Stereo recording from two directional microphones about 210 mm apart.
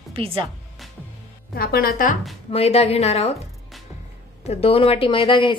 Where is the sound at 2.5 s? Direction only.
30° left (ahead or behind).